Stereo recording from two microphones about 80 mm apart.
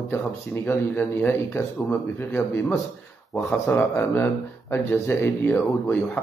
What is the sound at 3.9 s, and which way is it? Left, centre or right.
Speech, left.